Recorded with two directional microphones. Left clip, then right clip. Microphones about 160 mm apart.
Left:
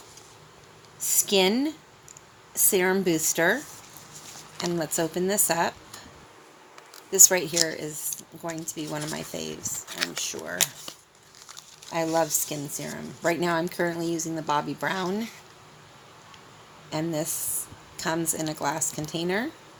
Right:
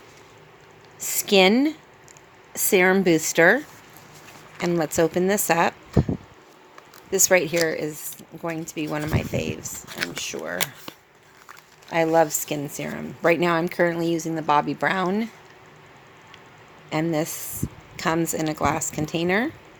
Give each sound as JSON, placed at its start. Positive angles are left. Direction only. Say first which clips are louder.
{"t": 1.0, "sound": "a sound", "louder": "right 5 dB", "side_deg": -65}
{"t": 2.5, "sound": "speech", "louder": "right 5 dB", "side_deg": -60}
{"t": 4.6, "sound": "speech", "louder": "right 6 dB", "side_deg": -60}
{"t": 7.1, "sound": "speech", "louder": "right 2 dB", "side_deg": -60}
{"t": 9.9, "sound": "a sound", "louder": "right 2 dB", "side_deg": -30}
{"t": 10.2, "sound": "speech", "louder": "right 4 dB", "side_deg": -55}
{"t": 11.9, "sound": "speech", "louder": "right 6 dB", "side_deg": -55}
{"t": 16.9, "sound": "speech", "louder": "right 5 dB", "side_deg": -55}